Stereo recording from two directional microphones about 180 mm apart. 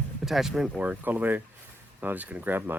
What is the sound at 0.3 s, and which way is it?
Speech, centre (ahead or behind).